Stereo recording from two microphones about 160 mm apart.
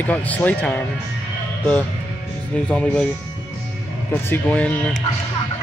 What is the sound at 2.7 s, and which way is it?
Speech, 5° left (ahead or behind).